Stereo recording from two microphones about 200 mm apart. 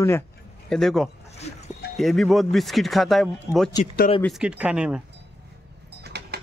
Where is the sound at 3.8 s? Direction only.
30° left (ahead or behind).